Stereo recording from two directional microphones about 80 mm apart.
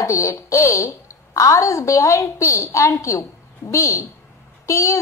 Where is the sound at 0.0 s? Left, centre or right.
Left.